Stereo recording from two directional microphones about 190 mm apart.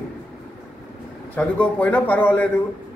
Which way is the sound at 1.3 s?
5° left (ahead or behind).